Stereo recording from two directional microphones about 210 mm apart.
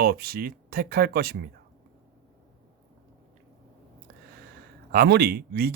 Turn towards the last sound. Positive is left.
turn(degrees=-50)  # may be behind; listen again after turning